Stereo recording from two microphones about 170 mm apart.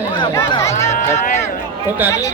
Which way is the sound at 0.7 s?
40° left (ahead or behind).